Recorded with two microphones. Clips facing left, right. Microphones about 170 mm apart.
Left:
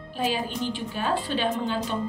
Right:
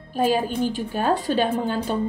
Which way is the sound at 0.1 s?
45° right (ahead or behind).